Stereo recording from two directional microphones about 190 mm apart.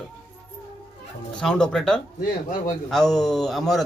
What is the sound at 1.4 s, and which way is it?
Speech, 5° left (ahead or behind).